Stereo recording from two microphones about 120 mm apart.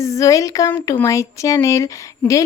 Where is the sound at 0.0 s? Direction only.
25° left (ahead or behind).